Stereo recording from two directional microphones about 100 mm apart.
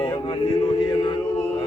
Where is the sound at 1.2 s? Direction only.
25° left (ahead or behind).